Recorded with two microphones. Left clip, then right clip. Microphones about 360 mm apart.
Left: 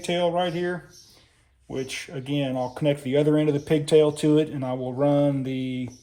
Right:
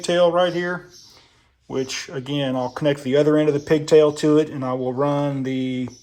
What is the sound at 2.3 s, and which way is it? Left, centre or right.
Speech, right.